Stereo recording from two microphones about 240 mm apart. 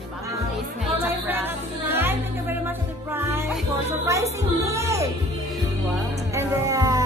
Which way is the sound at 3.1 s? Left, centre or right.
Centre.